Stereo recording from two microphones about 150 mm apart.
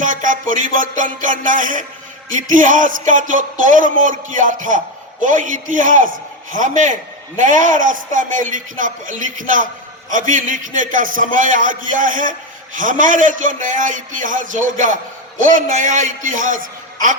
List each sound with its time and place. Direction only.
0.0 s speech: 60° right (ahead or behind)